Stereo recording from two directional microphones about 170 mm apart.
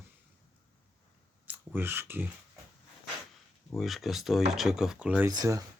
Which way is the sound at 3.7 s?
Centre (ahead or behind).